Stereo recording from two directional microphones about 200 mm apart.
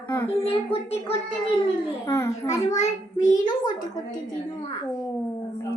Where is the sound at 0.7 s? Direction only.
30° left (ahead or behind).